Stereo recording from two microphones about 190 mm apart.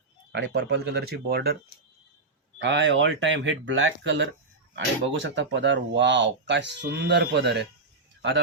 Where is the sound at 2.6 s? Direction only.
70° right (ahead or behind).